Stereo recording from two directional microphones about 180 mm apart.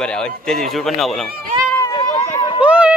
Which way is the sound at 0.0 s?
5° left (ahead or behind).